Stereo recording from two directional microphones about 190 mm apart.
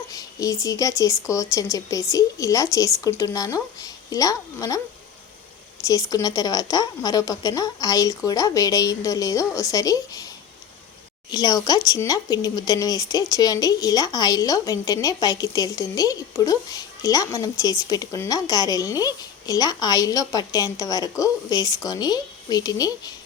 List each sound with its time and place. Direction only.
0.1 s speech: 20° left (ahead or behind)
5.8 s speech: 20° left (ahead or behind)
11.3 s speech: 20° left (ahead or behind)